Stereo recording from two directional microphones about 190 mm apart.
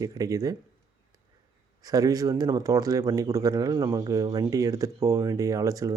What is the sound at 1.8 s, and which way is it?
Speech, 20° right (ahead or behind).